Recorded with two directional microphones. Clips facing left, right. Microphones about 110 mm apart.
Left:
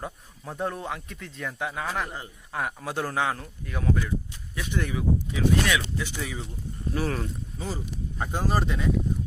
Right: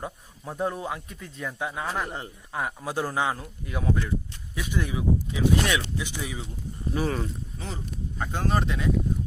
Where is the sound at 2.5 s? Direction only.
5° right (ahead or behind).